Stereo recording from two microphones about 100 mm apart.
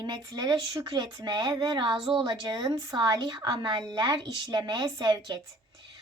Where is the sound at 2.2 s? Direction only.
40° right (ahead or behind).